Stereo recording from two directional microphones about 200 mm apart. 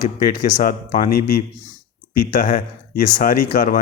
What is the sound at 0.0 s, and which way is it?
A man's voice, 40° left (ahead or behind).